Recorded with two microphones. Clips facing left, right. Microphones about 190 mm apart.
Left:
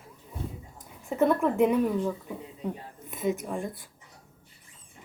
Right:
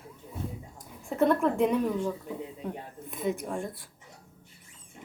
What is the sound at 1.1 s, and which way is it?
Speech, centre (ahead or behind).